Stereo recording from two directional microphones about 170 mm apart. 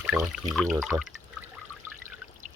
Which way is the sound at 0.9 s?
20° right (ahead or behind).